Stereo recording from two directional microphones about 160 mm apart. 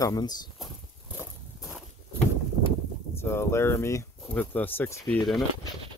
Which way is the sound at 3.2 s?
15° left (ahead or behind).